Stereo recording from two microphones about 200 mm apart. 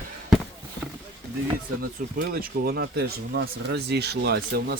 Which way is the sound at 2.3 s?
50° right (ahead or behind).